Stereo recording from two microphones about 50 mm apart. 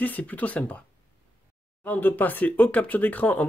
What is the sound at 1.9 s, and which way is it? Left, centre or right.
Speech, left.